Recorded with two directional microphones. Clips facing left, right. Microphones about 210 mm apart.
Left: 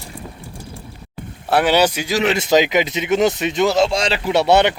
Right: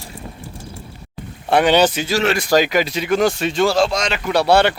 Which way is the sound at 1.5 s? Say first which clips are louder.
Right 1 dB; 5° left (ahead or behind).